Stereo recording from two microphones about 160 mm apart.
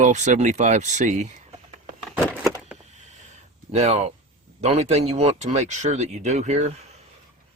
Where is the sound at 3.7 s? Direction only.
40° right (ahead or behind).